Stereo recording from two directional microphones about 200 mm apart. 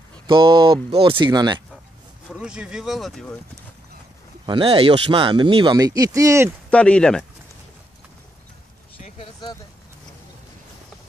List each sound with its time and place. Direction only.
0.3 s speech: 25° right (ahead or behind)
2.3 s speech: 5° right (ahead or behind)
4.5 s speech: 25° right (ahead or behind)
6.7 s speech: 5° left (ahead or behind)
8.9 s a sound: 30° left (ahead or behind)